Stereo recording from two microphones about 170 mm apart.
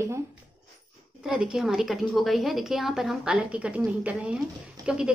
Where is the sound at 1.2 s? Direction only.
5° right (ahead or behind).